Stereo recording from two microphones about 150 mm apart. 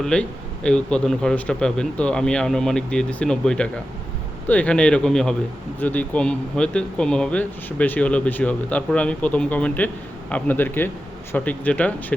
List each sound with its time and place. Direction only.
0.0 s a man's voice: 5° left (ahead or behind)